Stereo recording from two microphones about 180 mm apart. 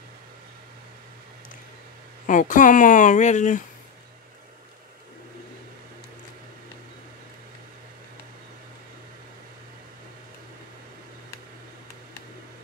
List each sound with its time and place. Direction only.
2.2 s speech: 45° left (ahead or behind)